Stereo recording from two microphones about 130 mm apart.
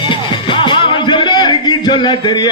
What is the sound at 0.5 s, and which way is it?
Music, 40° left (ahead or behind).